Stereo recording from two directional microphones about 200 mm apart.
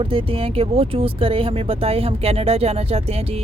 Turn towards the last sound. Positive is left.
turn(degrees=-30)  # may be behind; listen again after turning